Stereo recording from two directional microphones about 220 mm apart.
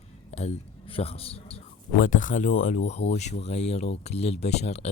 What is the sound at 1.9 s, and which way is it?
Speech, 35° left (ahead or behind).